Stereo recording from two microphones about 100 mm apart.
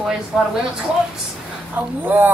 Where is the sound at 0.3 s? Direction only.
5° right (ahead or behind).